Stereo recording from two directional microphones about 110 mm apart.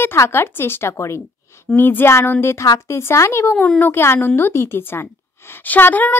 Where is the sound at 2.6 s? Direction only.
35° left (ahead or behind).